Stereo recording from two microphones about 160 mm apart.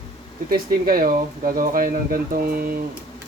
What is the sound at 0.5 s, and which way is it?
Speech, 65° right (ahead or behind).